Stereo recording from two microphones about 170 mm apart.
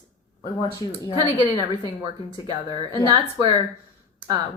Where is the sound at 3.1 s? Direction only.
25° right (ahead or behind).